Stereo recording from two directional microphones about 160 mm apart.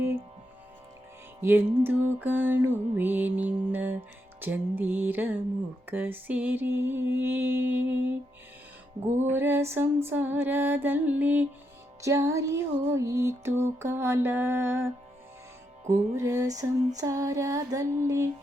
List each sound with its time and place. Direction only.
1.4 s music: 15° right (ahead or behind)
9.2 s music: 15° right (ahead or behind)
16.1 s music: 20° right (ahead or behind)